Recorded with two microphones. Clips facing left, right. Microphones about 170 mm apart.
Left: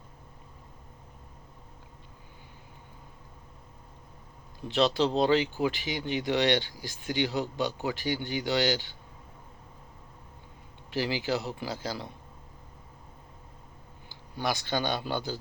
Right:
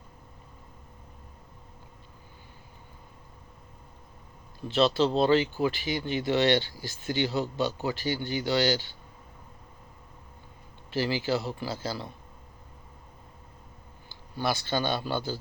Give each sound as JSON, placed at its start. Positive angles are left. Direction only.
{"t": 4.7, "sound": "speech", "side_deg": 15}
{"t": 10.9, "sound": "speech", "side_deg": 15}
{"t": 14.1, "sound": "speech", "side_deg": 15}